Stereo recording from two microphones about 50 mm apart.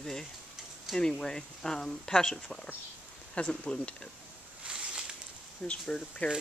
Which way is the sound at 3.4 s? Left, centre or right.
Centre.